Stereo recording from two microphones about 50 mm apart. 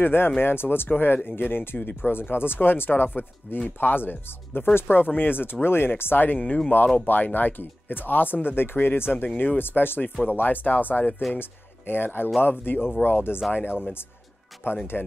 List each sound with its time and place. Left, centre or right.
0.0 s speech: left